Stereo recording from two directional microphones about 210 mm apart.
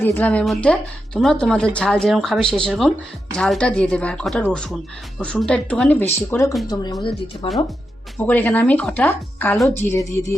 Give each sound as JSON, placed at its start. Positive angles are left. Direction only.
{"t": 0.0, "sound": "speech", "side_deg": 10}
{"t": 8.3, "sound": "speech", "side_deg": 10}